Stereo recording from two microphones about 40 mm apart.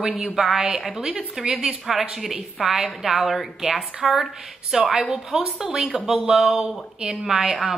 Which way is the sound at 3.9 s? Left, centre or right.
Centre.